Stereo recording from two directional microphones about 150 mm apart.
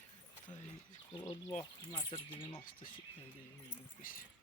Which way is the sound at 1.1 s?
30° left (ahead or behind).